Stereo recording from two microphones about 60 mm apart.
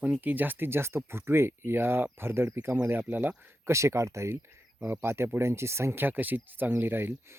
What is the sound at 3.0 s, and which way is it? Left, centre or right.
Speech, right.